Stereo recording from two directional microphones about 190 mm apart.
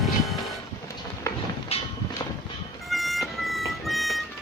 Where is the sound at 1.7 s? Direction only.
30° left (ahead or behind).